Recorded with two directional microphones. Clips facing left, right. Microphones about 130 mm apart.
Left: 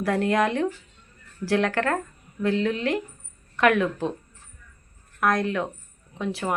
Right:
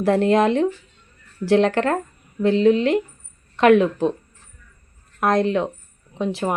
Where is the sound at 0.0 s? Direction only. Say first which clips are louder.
Right 6 dB; 25° right (ahead or behind).